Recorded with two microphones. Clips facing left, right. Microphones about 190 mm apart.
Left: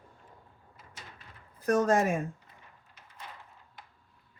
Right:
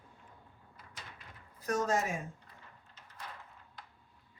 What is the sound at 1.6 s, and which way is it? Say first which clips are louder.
Speech: left 7 dB; 55° left (ahead or behind).